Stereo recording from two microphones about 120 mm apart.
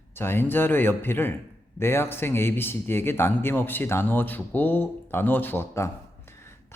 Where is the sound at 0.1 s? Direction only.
20° left (ahead or behind).